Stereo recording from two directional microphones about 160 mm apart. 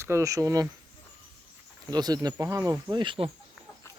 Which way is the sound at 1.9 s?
25° right (ahead or behind).